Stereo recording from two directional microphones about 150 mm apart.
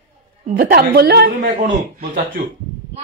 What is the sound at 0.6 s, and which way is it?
Speech, 90° right.